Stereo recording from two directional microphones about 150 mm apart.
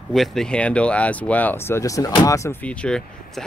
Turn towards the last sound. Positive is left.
turn(degrees=5)  # may be behind; listen again after turning